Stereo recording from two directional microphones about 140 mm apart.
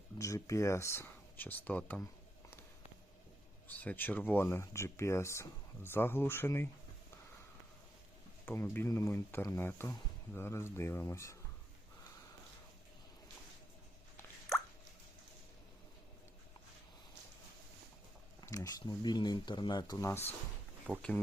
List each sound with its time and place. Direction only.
0.2 s speech: 20° left (ahead or behind)
3.7 s speech: 10° left (ahead or behind)
8.4 s speech: 15° left (ahead or behind)
18.3 s speech: 25° left (ahead or behind)
20.9 s speech: 5° right (ahead or behind)